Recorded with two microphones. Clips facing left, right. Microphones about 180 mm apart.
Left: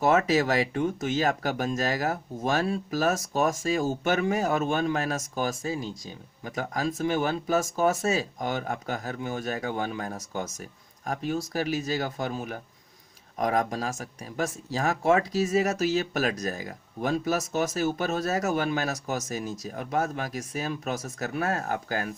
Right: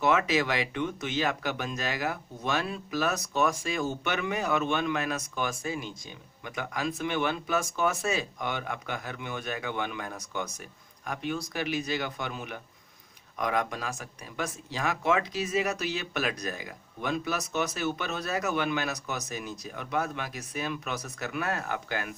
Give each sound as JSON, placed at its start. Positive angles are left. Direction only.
{"t": 0.0, "sound": "speech", "side_deg": 40}